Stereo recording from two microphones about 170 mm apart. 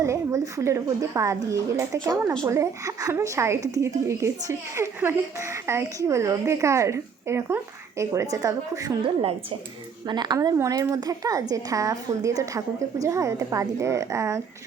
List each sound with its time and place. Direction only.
0.0 s a woman's voice: 20° right (ahead or behind)
10.1 s a woman's voice: 25° right (ahead or behind)